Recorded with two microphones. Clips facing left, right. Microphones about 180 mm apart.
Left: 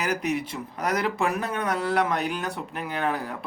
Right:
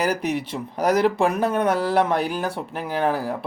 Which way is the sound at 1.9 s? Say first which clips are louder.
Right 4 dB; 35° right (ahead or behind).